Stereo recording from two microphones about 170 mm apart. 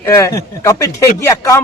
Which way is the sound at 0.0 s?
15° left (ahead or behind).